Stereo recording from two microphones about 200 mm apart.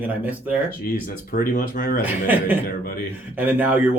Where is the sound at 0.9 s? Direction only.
45° left (ahead or behind).